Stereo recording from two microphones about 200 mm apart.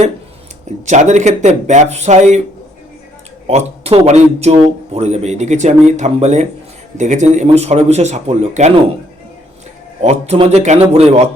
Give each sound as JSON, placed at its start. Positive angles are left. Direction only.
{"t": 0.9, "sound": "speech", "side_deg": -35}
{"t": 3.4, "sound": "speech", "side_deg": -30}
{"t": 10.0, "sound": "speech", "side_deg": -35}